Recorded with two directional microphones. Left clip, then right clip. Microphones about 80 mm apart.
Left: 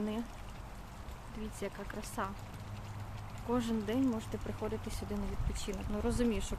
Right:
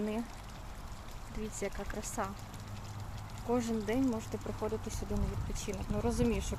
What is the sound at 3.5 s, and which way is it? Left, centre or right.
Speech, centre.